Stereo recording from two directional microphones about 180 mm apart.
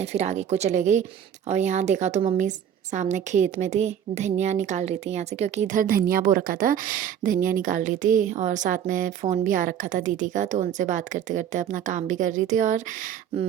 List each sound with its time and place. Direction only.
0.0 s a woman's voice: 35° right (ahead or behind)